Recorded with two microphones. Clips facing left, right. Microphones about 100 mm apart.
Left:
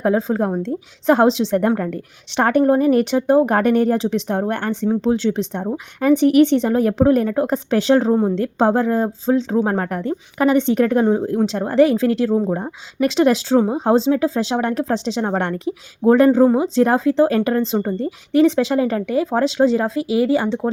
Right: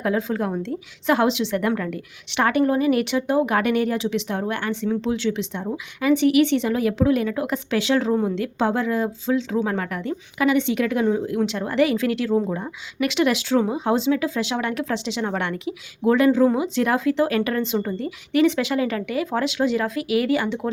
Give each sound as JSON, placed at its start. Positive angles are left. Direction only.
{"t": 0.0, "sound": "speech", "side_deg": 30}